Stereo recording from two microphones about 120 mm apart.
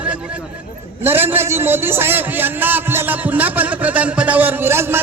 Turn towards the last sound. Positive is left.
turn(degrees=-20)  # may be behind; listen again after turning